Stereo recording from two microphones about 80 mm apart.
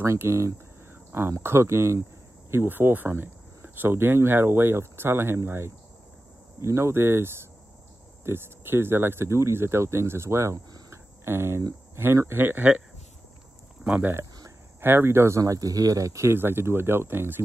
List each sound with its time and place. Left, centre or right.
0.0 s speech: right
10.9 s cricket: right
11.9 s speech: right
13.8 s speech: centre
14.8 s speech: right